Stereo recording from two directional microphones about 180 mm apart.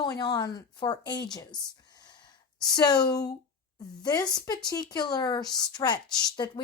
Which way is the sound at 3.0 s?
20° left (ahead or behind).